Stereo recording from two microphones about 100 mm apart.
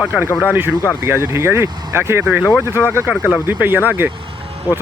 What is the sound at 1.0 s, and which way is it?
Speech, 25° right (ahead or behind).